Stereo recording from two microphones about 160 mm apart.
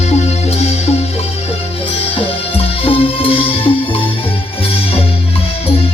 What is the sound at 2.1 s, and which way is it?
Music, 35° left (ahead or behind).